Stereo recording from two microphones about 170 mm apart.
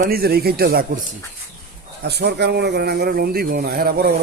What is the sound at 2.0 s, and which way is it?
A man's voice, 75° right (ahead or behind).